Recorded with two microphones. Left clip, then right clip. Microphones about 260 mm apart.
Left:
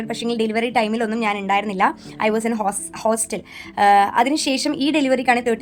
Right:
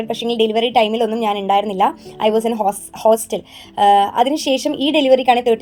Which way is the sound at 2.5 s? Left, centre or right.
Left.